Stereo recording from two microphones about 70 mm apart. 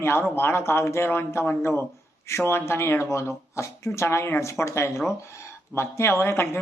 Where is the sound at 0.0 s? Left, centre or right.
Left.